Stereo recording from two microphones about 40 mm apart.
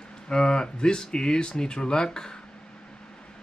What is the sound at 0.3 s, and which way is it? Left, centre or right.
Speech, left.